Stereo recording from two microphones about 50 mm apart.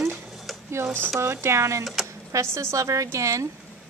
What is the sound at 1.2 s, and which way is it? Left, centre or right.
A woman's voice, right.